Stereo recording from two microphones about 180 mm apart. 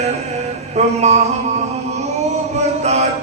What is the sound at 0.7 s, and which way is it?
Mantra, 40° right (ahead or behind).